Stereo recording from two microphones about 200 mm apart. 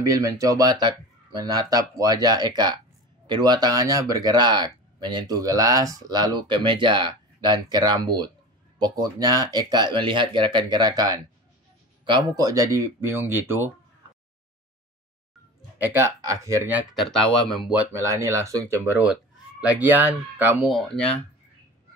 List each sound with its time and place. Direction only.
0.0 s speech: 15° right (ahead or behind)
15.8 s speech: 10° right (ahead or behind)